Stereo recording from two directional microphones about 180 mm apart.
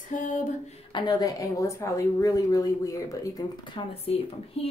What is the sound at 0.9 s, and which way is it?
A woman's voice, 25° left (ahead or behind).